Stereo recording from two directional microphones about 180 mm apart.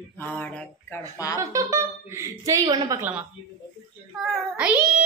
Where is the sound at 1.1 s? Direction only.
20° left (ahead or behind).